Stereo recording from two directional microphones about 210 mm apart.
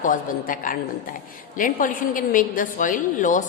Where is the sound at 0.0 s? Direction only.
40° left (ahead or behind).